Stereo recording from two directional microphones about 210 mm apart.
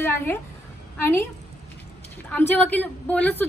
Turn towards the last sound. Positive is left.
turn(degrees=5)  # may be behind; listen again after turning